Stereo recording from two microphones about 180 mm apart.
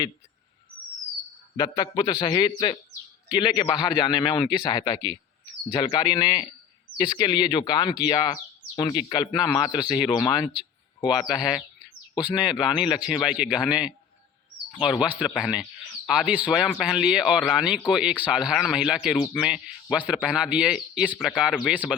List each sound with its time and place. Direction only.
1.5 s speech: 20° left (ahead or behind)
9.7 s speech: 5° right (ahead or behind)
10.1 s speech: 25° left (ahead or behind)
11.3 s speech: 5° right (ahead or behind)